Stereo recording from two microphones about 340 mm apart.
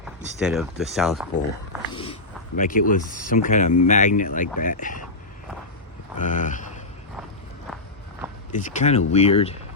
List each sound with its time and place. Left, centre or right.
0.3 s speech: centre
2.6 s speech: left
6.1 s speech: left
8.5 s speech: left